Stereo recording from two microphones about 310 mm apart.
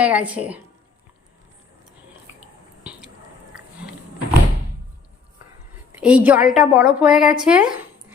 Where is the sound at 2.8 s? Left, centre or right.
Centre.